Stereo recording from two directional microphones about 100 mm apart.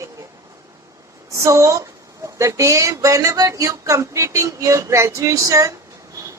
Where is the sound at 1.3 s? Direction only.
30° right (ahead or behind).